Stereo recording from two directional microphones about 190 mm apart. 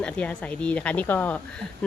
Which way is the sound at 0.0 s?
5° left (ahead or behind).